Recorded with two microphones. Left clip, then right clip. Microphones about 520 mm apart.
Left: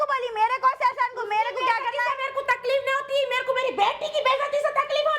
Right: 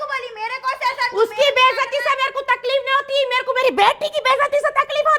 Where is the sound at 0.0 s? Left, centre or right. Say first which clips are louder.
Left 2 dB; left.